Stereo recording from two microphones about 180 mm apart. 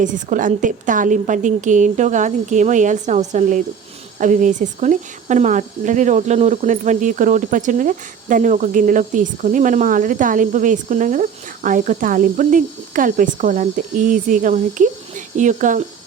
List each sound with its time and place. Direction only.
0.0 s speech: 45° right (ahead or behind)